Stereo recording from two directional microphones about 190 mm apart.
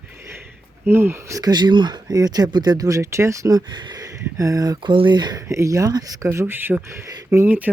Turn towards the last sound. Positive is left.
turn(degrees=-10)  # may be behind; listen again after turning